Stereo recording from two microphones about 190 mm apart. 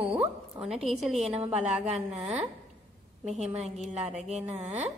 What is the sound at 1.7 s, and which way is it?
Speech, 5° right (ahead or behind).